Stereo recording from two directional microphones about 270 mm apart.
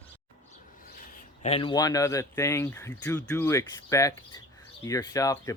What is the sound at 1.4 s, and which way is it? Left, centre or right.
Speech, left.